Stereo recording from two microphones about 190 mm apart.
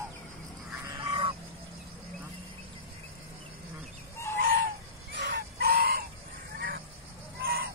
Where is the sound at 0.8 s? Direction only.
20° right (ahead or behind).